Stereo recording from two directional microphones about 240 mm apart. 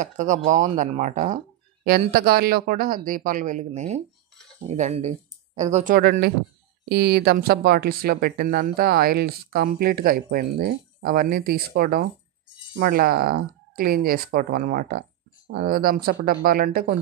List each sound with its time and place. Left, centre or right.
0.0 s speech: right